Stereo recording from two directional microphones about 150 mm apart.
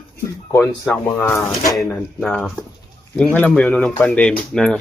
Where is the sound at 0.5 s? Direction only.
10° left (ahead or behind).